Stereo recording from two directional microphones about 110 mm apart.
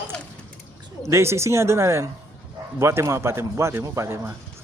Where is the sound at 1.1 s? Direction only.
25° right (ahead or behind).